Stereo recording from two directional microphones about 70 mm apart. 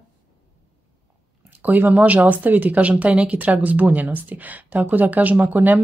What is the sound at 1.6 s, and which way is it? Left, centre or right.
Speech, right.